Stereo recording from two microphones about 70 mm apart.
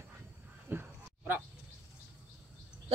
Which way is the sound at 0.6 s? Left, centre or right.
Right.